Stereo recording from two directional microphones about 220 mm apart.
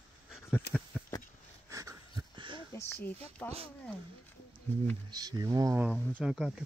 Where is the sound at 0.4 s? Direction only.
15° left (ahead or behind).